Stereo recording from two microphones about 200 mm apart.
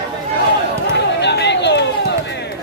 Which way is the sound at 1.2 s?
60° left (ahead or behind).